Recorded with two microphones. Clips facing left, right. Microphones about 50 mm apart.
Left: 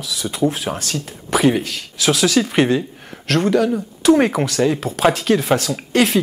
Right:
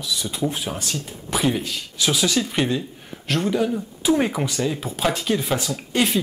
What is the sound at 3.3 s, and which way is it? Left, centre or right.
Speech, left.